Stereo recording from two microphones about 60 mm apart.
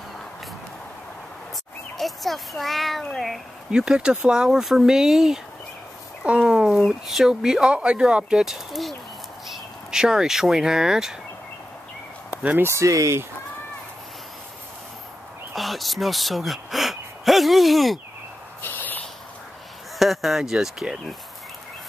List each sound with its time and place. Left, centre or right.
2.0 s a child's voice: centre
3.7 s speech: centre
6.4 s a sound: centre
7.1 s speech: centre
12.3 s speech: right
12.7 s speech: right
15.5 s speech: centre
18.6 s a sound: left
20.0 s a sound: centre
20.5 s speech: centre